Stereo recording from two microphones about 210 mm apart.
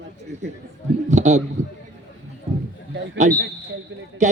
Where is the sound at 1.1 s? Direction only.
35° right (ahead or behind).